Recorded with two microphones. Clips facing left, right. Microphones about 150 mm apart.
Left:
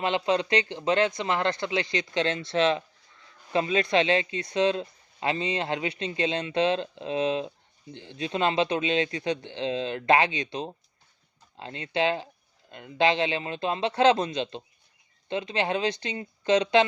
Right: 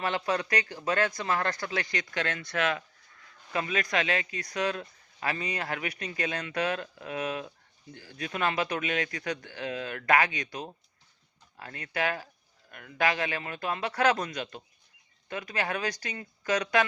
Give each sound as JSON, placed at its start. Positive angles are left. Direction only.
{"t": 0.0, "sound": "speech", "side_deg": 20}